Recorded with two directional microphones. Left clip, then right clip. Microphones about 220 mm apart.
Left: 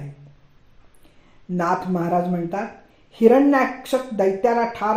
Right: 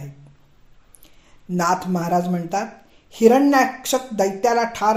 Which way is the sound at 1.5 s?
30° right (ahead or behind).